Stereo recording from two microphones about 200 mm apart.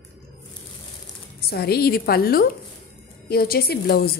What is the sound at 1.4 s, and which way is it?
A woman's voice, 50° left (ahead or behind).